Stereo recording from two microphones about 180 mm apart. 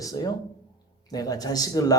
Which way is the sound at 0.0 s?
20° left (ahead or behind).